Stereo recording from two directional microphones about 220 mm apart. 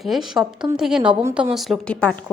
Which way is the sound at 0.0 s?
Centre (ahead or behind).